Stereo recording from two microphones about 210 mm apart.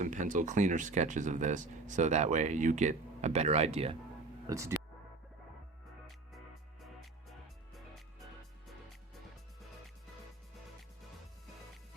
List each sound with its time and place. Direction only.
0.0 s speech: 35° right (ahead or behind)
4.4 s speech: 15° right (ahead or behind)
6.8 s music: centre (ahead or behind)